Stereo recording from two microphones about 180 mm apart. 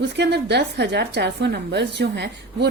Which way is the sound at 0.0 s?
70° right (ahead or behind).